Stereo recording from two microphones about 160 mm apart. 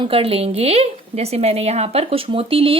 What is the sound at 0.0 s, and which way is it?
A woman's voice, 35° right (ahead or behind).